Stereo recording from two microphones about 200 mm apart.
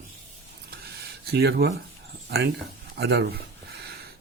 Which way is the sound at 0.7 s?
50° right (ahead or behind).